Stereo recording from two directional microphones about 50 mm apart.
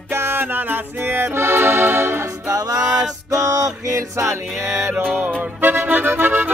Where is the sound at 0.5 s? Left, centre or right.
Right.